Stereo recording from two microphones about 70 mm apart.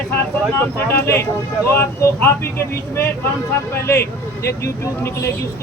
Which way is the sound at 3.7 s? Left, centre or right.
Left.